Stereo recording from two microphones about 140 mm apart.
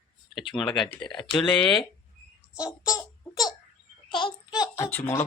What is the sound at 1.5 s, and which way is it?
Speech, 5° left (ahead or behind).